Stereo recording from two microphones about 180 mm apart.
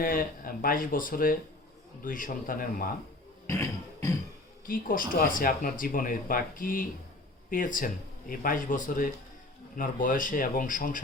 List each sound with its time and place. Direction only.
0.0 s speech: 50° left (ahead or behind)
3.4 s music: 15° left (ahead or behind)
4.6 s speech: 50° left (ahead or behind)